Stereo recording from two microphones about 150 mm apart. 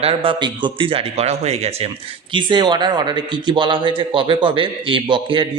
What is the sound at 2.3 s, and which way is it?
A man's voice, 30° right (ahead or behind).